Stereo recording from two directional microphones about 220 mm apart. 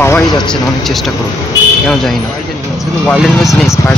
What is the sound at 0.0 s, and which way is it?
Speech, 10° left (ahead or behind).